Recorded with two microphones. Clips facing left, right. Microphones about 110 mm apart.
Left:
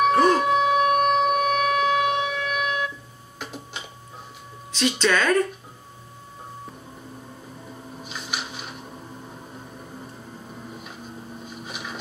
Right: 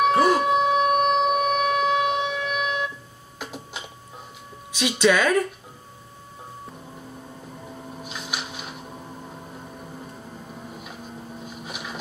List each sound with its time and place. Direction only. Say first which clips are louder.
0.0 s shofar: even; 5° right (ahead or behind)
3.3 s a sound: even; 5° right (ahead or behind)
4.7 s speech: right 2 dB; 10° right (ahead or behind)
8.0 s printer: left 1 dB; 5° right (ahead or behind)
11.6 s boat: even; 5° right (ahead or behind)